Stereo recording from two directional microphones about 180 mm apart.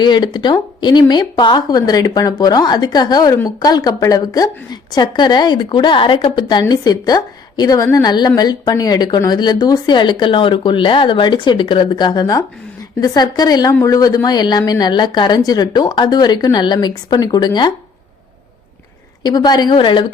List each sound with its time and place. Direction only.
0.0 s speech: 25° left (ahead or behind)
19.2 s speech: 25° left (ahead or behind)